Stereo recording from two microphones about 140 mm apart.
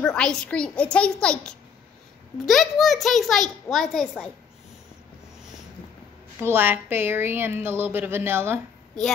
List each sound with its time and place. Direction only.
0.0 s a child's voice: 5° left (ahead or behind)
6.4 s a woman's voice: 15° right (ahead or behind)